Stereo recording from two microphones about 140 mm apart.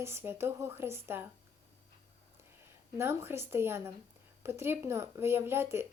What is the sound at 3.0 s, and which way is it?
Speech, 15° right (ahead or behind).